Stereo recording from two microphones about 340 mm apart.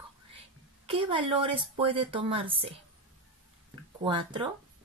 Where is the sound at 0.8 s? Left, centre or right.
Centre.